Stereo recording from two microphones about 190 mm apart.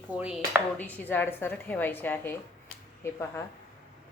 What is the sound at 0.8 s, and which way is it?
A woman's voice, 10° left (ahead or behind).